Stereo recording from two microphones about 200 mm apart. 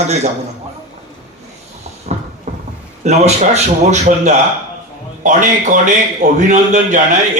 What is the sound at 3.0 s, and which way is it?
A man's voice, 35° right (ahead or behind).